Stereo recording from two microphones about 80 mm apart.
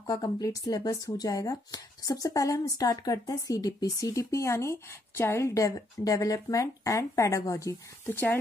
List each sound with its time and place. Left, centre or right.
0.1 s speech: left
8.0 s speech: left